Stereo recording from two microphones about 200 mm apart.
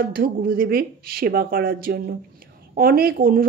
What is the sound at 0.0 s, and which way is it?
Speech, 45° right (ahead or behind).